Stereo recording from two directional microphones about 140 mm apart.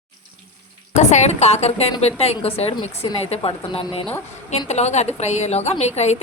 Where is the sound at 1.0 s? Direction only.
55° left (ahead or behind).